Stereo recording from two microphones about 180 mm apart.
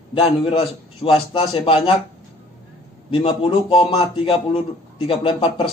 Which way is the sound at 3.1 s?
30° left (ahead or behind).